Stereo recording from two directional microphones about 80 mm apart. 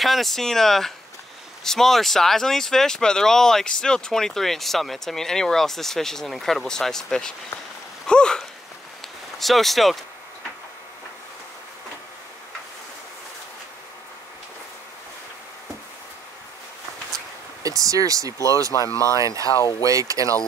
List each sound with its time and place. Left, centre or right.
0.0 s speech: centre
8.1 s a sound: centre
9.4 s speech: centre
17.6 s speech: right